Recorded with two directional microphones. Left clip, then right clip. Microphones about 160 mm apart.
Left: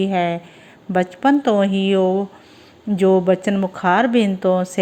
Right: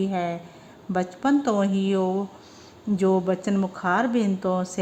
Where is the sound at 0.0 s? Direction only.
20° left (ahead or behind).